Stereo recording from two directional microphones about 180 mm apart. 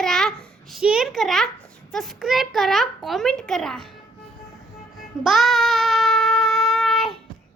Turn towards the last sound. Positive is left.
turn(degrees=0)  # may be behind; listen again after turning